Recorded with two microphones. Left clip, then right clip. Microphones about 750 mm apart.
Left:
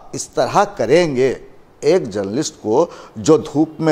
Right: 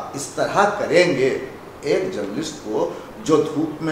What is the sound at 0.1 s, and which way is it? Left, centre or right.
A man's voice, left.